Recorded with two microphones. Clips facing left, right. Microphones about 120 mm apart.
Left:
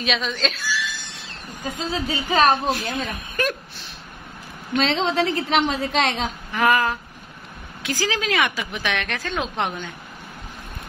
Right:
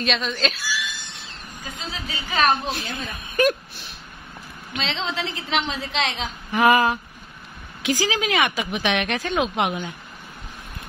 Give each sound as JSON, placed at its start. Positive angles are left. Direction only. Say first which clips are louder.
{"t": 0.0, "sound": "a woman's voice", "louder": "even", "side_deg": 0}
{"t": 1.8, "sound": "a woman's voice", "louder": "left 8 dB", "side_deg": 35}
{"t": 3.3, "sound": "speech", "louder": "right 6 dB", "side_deg": -15}
{"t": 4.7, "sound": "a woman's voice", "louder": "left 7 dB", "side_deg": 50}
{"t": 6.5, "sound": "a sound", "louder": "right 3 dB", "side_deg": -20}
{"t": 7.8, "sound": "speech", "louder": "right 2 dB", "side_deg": -15}